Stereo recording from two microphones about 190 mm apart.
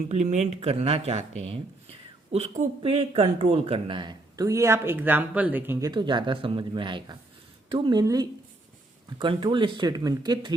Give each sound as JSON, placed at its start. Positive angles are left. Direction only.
{"t": 0.1, "sound": "speech", "side_deg": -35}
{"t": 5.9, "sound": "speech", "side_deg": -25}